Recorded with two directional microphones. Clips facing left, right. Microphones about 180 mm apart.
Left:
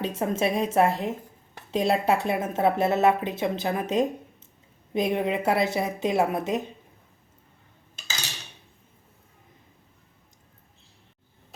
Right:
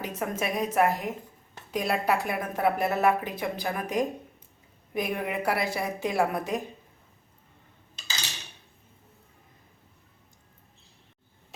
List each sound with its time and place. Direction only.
0.0 s a woman's voice: 30° left (ahead or behind)